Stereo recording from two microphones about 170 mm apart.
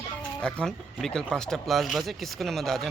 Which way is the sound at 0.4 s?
5° left (ahead or behind).